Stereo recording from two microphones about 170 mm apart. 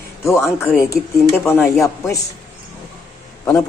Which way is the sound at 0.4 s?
15° left (ahead or behind).